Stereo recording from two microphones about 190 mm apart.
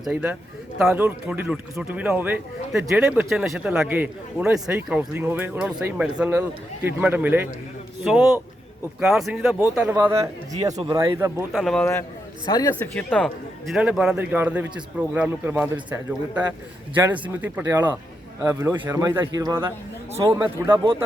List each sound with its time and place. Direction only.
0.0 s a man's voice: 10° right (ahead or behind)
9.9 s speech: 15° right (ahead or behind)
11.5 s speech: 5° left (ahead or behind)
12.9 s a man's voice: 5° left (ahead or behind); by 20.8 s 15° right (ahead or behind)